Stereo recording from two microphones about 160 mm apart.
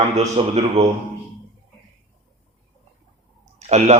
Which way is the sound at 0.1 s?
40° right (ahead or behind).